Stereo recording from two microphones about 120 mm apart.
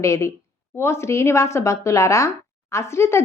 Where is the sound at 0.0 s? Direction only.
25° left (ahead or behind).